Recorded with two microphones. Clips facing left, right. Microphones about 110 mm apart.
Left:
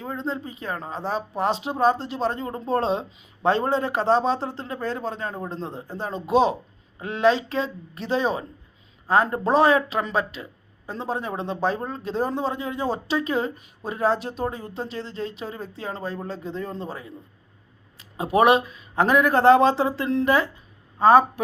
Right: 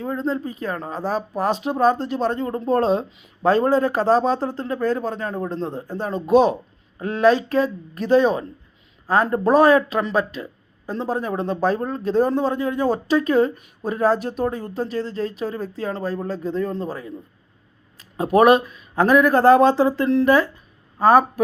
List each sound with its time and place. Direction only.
0.0 s speech: 25° left (ahead or behind)
18.2 s speech: 25° left (ahead or behind)